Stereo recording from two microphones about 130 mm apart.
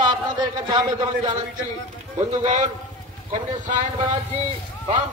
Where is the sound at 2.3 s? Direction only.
70° right (ahead or behind).